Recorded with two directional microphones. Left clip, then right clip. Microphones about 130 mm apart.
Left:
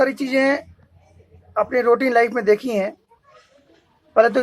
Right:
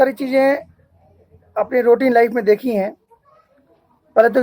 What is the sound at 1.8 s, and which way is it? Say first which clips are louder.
Speech: right 4 dB; 70° right (ahead or behind).